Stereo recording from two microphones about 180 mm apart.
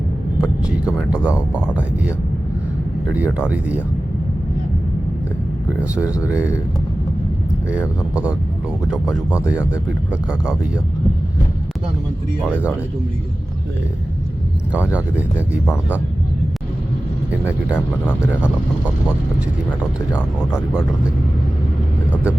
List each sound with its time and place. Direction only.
0.4 s speech: 5° right (ahead or behind)
3.2 s speech: 10° right (ahead or behind)
5.9 s speech: 20° left (ahead or behind)
6.2 s speech: 10° right (ahead or behind)
8.1 s speech: 5° right (ahead or behind)
9.5 s speech: 10° right (ahead or behind)
14.7 s speech: 5° right (ahead or behind)
22.1 s vehicle: 10° right (ahead or behind)